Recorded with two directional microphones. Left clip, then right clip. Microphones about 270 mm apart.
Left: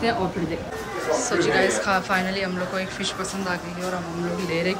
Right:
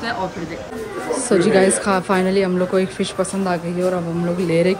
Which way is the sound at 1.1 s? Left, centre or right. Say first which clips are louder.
Right 5 dB; centre.